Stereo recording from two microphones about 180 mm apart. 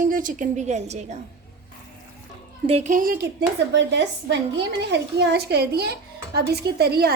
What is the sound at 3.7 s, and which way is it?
A woman's voice, 80° right.